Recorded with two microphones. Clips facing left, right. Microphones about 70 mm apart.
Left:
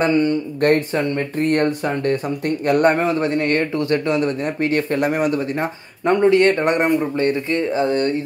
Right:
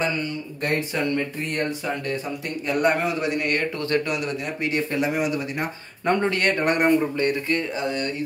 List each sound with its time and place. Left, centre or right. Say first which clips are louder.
0.0 s speech: left 9 dB; left
0.9 s speech: left 4 dB; left
1.4 s a man's voice: left 9 dB; left
3.0 s a man's voice: left 6 dB; left
4.6 s speech: left 4 dB; left
5.6 s speech: left 5 dB; left